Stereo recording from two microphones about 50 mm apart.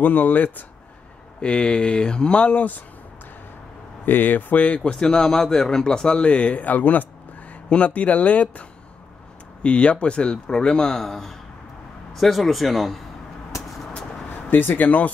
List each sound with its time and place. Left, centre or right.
0.0 s speech: left
1.4 s speech: left
4.0 s speech: left
4.9 s speech: centre
11.0 s a man's voice: centre
14.5 s speech: left